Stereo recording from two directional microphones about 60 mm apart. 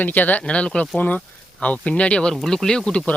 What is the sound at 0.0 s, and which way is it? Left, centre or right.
Speech, left.